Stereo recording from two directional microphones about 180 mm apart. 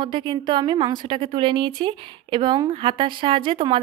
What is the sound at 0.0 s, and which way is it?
Speech, 25° right (ahead or behind).